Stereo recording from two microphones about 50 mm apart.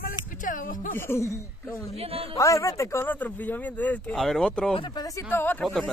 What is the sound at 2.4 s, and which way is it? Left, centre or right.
Speech, left.